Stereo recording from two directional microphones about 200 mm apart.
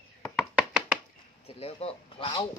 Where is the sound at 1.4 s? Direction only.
30° left (ahead or behind).